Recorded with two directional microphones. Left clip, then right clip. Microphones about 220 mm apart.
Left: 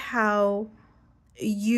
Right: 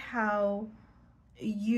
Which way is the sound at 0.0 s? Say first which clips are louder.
Left 6 dB; 55° left (ahead or behind).